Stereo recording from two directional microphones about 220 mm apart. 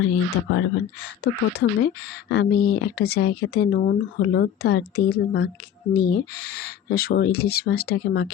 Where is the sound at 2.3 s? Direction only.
50° left (ahead or behind).